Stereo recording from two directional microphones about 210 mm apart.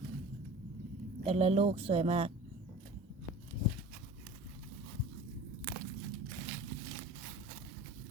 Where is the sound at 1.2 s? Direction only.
30° right (ahead or behind).